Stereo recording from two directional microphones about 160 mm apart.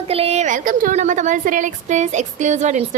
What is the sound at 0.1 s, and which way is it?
A woman's voice, 40° right (ahead or behind).